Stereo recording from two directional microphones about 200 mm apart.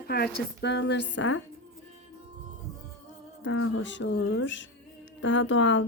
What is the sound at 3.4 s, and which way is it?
A woman's voice, 90° left.